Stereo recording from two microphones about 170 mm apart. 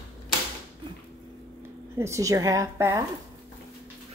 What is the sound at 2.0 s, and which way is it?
A woman's voice, 20° right (ahead or behind).